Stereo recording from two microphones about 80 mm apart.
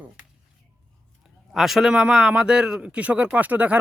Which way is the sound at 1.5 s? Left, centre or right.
Centre.